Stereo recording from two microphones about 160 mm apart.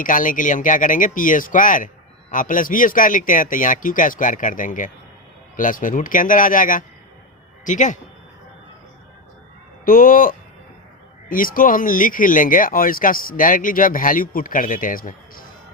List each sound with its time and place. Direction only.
0.0 s a man's voice: 55° left (ahead or behind)
9.8 s speech: 60° left (ahead or behind)